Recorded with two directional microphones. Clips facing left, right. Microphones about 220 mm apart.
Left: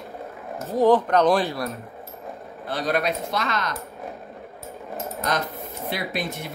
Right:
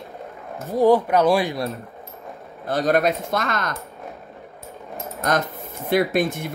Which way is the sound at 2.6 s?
45° right (ahead or behind).